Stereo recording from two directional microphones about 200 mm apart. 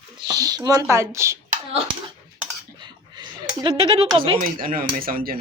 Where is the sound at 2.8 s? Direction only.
20° right (ahead or behind).